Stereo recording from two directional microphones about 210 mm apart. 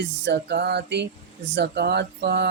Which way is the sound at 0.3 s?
50° right (ahead or behind).